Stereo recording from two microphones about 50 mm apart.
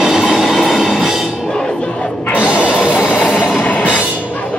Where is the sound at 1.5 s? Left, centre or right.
Centre.